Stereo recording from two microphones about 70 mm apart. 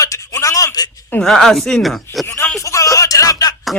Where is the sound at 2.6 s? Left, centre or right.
Left.